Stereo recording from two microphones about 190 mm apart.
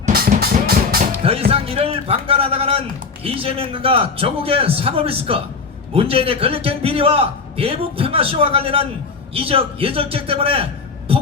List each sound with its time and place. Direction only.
0.1 s music: 55° right (ahead or behind)
1.5 s a man's voice: 30° right (ahead or behind)